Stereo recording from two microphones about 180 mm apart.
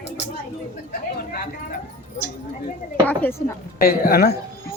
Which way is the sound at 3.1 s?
10° left (ahead or behind).